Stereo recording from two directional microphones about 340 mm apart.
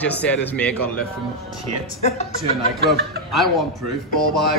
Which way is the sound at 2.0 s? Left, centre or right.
Centre.